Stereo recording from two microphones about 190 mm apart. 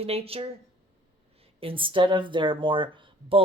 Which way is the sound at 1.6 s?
25° right (ahead or behind).